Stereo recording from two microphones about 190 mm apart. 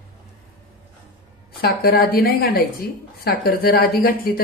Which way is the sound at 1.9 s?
50° left (ahead or behind).